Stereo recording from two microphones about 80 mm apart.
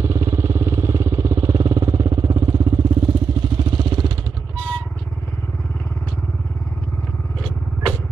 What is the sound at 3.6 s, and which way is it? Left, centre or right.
Vehicle, right.